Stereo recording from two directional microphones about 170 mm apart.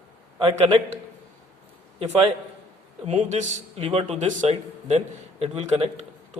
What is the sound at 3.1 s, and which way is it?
A man's voice, 45° right (ahead or behind).